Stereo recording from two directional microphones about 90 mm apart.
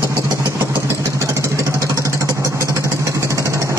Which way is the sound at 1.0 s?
35° right (ahead or behind).